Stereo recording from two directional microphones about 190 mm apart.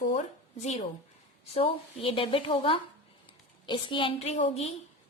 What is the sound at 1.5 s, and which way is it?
A woman's voice, 30° left (ahead or behind).